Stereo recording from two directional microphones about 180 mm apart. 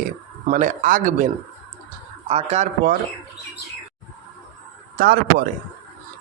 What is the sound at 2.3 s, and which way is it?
Speech, 35° right (ahead or behind).